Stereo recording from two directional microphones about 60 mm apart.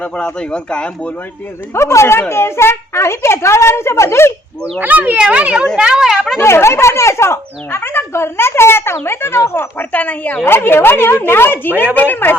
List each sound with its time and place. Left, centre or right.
0.0 s speech: left
1.7 s a child's voice: left
4.8 s a woman's voice: right; by 6.4 s centre
6.4 s a child's voice: left
9.9 s speech: left
10.4 s a woman's voice: left